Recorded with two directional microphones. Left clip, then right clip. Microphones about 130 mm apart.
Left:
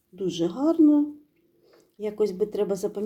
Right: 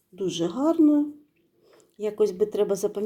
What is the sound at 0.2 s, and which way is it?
Speech, 25° right (ahead or behind).